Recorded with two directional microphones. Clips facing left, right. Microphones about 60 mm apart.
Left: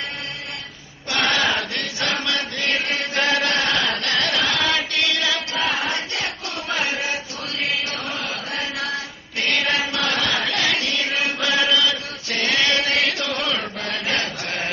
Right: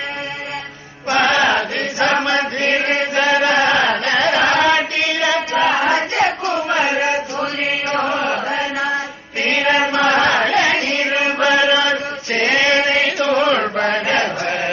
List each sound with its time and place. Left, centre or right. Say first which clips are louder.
1.1 s chant: right 6 dB; centre
3.2 s chant: right 6 dB; centre; by 7.4 s right
7.9 s mantra: right 10 dB; right
8.5 s chant: right 7 dB; right
13.6 s chant: right 10 dB; right
14.1 s chant: right 7 dB; right